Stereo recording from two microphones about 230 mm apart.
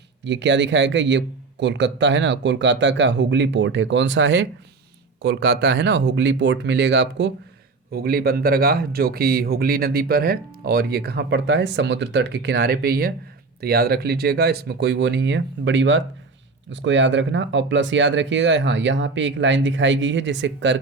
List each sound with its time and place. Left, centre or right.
0.3 s speech: right